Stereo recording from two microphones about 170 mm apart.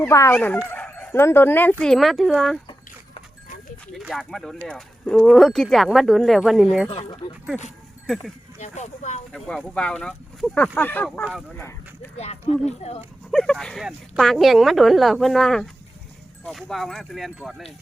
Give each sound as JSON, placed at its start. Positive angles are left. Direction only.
{"t": 0.0, "sound": "speech", "side_deg": 15}
{"t": 4.0, "sound": "speech", "side_deg": 0}
{"t": 6.9, "sound": "speech", "side_deg": 35}
{"t": 8.0, "sound": "speech", "side_deg": 0}
{"t": 8.5, "sound": "speech", "side_deg": 45}
{"t": 9.3, "sound": "speech", "side_deg": 5}
{"t": 12.1, "sound": "speech", "side_deg": 40}
{"t": 13.3, "sound": "speech", "side_deg": 5}